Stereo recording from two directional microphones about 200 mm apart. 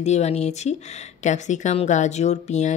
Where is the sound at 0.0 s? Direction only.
35° left (ahead or behind).